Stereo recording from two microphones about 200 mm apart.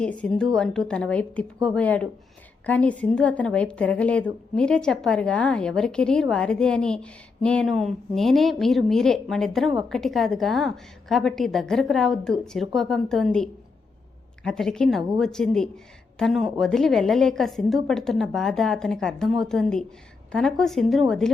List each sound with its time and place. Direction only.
0.0 s a woman's voice: 5° left (ahead or behind)